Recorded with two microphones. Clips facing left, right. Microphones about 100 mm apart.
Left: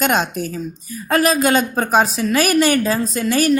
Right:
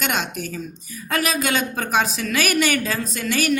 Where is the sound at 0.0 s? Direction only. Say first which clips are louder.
Left 7 dB; 40° left (ahead or behind).